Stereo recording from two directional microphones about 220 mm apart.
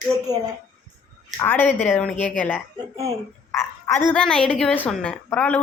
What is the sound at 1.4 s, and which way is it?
A woman's voice, 10° left (ahead or behind).